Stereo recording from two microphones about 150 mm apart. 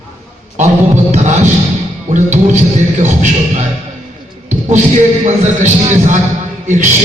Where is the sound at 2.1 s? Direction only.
55° right (ahead or behind).